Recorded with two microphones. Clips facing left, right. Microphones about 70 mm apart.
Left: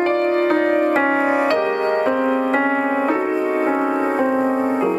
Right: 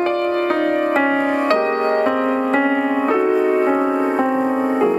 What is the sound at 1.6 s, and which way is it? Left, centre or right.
Music, centre.